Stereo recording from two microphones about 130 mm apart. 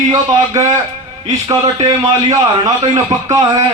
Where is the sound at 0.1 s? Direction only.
25° right (ahead or behind).